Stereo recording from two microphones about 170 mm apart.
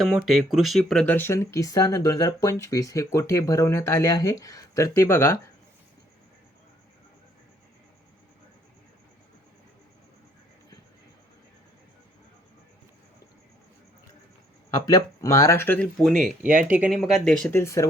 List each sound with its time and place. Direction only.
0.0 s speech: centre (ahead or behind); by 5.4 s 15° left (ahead or behind)
14.8 s speech: 20° left (ahead or behind); by 16.4 s centre (ahead or behind)
16.4 s speech: 50° right (ahead or behind)
16.6 s speech: 5° right (ahead or behind)
17.5 s speech: 15° left (ahead or behind)